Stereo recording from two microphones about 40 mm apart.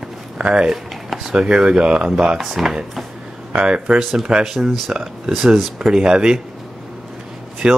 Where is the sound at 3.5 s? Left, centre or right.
Right.